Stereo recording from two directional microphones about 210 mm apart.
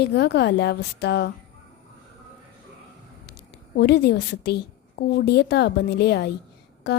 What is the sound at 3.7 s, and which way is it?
A woman's voice, 50° left (ahead or behind).